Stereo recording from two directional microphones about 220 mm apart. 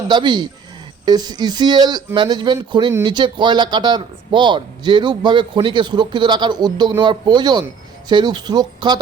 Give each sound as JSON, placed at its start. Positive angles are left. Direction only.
{"t": 0.1, "sound": "speech", "side_deg": -20}